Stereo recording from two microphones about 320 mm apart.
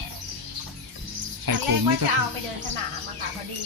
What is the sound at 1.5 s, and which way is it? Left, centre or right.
Music, right.